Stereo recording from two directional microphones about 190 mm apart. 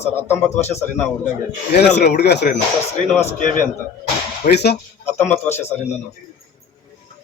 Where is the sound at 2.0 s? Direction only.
60° left (ahead or behind).